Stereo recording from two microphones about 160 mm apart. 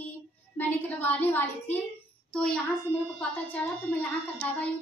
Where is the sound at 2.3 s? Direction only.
5° left (ahead or behind).